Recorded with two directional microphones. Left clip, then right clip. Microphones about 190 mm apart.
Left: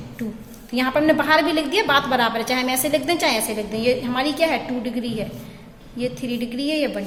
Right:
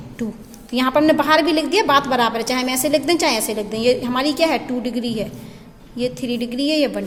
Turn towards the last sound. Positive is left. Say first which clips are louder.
# right 4 dB
turn(degrees=-45)  # may be behind; listen again after turning